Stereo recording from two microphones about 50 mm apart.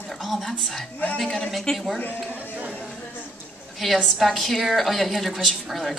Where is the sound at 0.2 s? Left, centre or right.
Centre.